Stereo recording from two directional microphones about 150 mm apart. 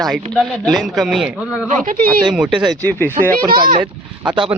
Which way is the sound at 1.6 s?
60° right (ahead or behind).